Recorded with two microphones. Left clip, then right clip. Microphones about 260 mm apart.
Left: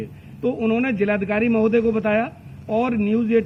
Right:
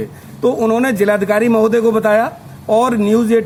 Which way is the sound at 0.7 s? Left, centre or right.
Centre.